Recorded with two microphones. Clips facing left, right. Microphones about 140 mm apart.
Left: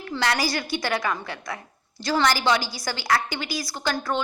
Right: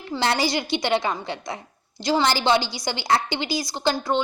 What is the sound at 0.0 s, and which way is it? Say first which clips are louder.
A woman's voice: right 2 dB; 25° right (ahead or behind).